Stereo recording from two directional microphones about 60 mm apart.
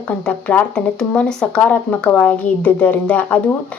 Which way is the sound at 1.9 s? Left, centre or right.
Left.